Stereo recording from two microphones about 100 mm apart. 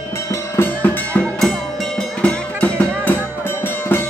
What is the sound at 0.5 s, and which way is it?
Music, 20° left (ahead or behind).